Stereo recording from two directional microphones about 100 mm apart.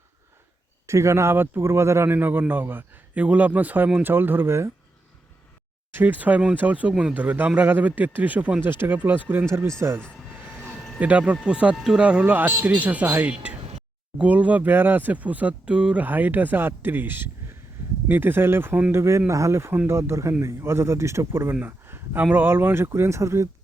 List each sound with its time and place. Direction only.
0.9 s speech: 30° right (ahead or behind)
5.9 s speech: 20° right (ahead or behind)
9.5 s speech: 30° right (ahead or behind)
11.0 s speech: 10° right (ahead or behind); by 23.5 s 30° right (ahead or behind)